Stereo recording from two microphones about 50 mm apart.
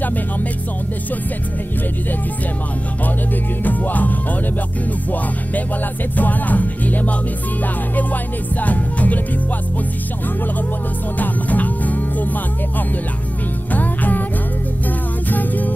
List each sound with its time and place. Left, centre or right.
3.6 s music: left
6.1 s music: left
11.1 s music: left
13.7 s music: left
15.3 s music: left